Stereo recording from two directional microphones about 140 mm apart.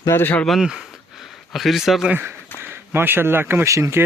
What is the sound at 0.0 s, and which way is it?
Speech, 15° left (ahead or behind).